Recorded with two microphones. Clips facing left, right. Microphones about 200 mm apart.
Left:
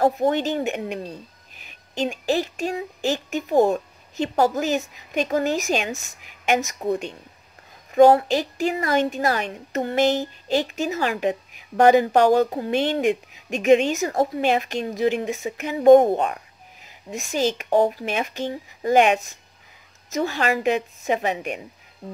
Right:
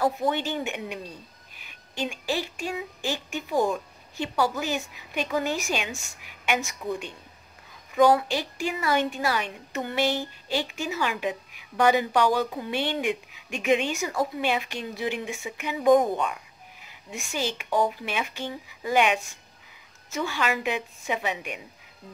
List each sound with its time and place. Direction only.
0.0 s a woman's voice: 45° left (ahead or behind); by 16.3 s 60° left (ahead or behind)
17.1 s a woman's voice: 40° left (ahead or behind)